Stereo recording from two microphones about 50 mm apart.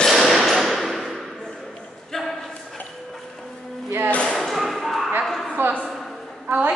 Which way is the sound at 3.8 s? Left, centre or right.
Right.